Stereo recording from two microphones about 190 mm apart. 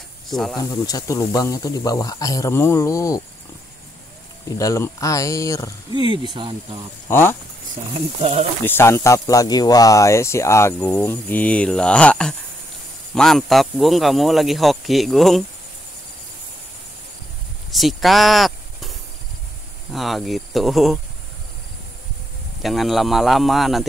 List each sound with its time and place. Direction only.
0.3 s speech: centre (ahead or behind)
0.6 s speech: 20° left (ahead or behind)
4.6 s speech: 15° left (ahead or behind)
5.9 s speech: 25° right (ahead or behind)
7.1 s speech: 10° left (ahead or behind)
7.9 s speech: 30° right (ahead or behind)
8.6 s speech: 10° left (ahead or behind)
17.6 s speech: centre (ahead or behind)
22.6 s speech: centre (ahead or behind)